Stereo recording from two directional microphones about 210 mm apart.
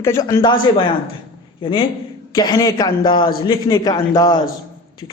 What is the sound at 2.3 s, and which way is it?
A man's voice, 20° left (ahead or behind).